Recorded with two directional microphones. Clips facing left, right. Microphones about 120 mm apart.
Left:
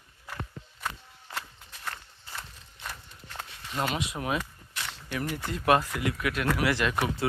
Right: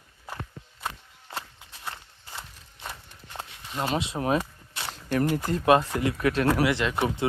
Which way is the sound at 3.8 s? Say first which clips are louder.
Right 6 dB; 30° right (ahead or behind).